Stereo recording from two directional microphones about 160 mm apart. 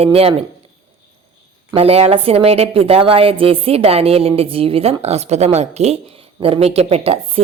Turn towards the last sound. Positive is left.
turn(degrees=-40)  # may be behind; listen again after turning